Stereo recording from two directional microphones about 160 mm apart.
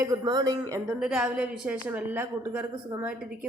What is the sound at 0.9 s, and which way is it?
A woman's voice, 5° right (ahead or behind).